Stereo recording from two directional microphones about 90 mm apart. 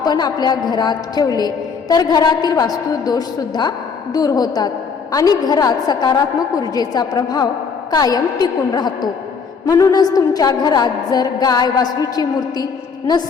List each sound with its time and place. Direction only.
0.0 s a woman's voice: 50° left (ahead or behind)